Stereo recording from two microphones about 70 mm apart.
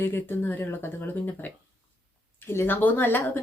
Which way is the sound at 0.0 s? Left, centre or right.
Left.